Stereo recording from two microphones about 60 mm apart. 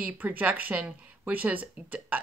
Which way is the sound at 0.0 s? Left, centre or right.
Right.